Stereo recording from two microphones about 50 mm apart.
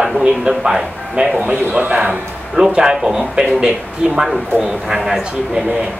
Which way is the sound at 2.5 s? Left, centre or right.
Centre.